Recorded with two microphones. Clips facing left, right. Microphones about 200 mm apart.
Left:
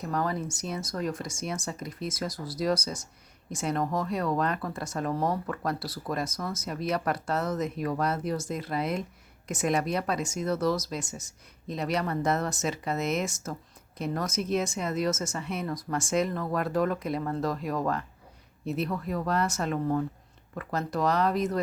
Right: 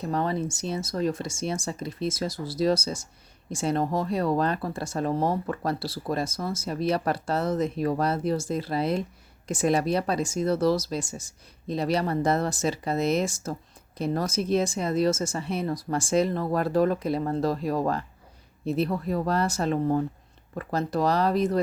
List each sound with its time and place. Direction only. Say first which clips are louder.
0.0 s speech: right 3 dB; 25° right (ahead or behind)